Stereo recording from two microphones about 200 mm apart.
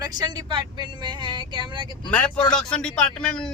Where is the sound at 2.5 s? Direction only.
5° left (ahead or behind).